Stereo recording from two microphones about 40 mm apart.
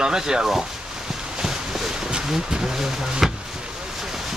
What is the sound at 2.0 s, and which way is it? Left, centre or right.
Speech, centre.